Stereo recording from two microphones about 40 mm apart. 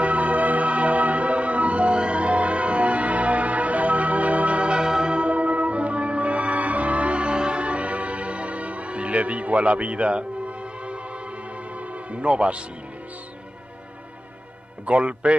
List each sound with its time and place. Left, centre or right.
0.0 s music: right
14.9 s a man's voice: right